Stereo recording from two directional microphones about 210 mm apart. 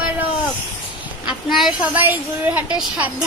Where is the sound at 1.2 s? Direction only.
Centre (ahead or behind).